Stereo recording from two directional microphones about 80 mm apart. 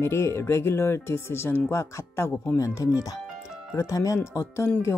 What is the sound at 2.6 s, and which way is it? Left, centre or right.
Speech, left.